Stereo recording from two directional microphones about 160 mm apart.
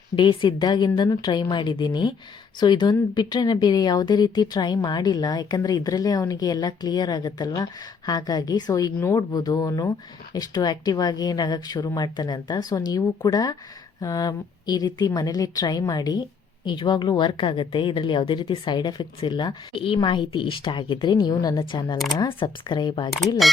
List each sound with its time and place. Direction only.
0.2 s speech: 30° left (ahead or behind)
23.4 s speech: centre (ahead or behind)